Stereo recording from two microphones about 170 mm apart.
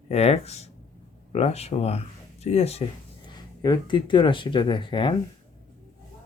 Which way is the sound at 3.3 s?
25° left (ahead or behind).